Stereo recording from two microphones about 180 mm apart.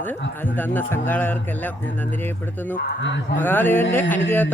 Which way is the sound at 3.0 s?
90° left.